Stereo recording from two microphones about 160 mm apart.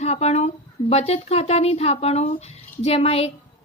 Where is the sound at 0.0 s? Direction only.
40° left (ahead or behind).